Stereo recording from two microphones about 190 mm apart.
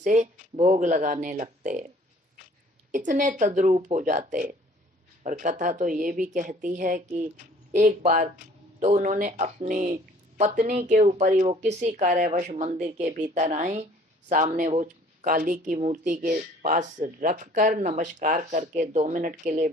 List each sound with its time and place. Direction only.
0.0 s speech: 40° right (ahead or behind)
2.9 s speech: 40° right (ahead or behind)